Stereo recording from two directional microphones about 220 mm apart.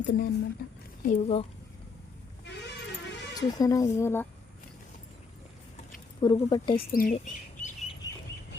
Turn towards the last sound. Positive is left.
turn(degrees=30)  # may be behind; listen again after turning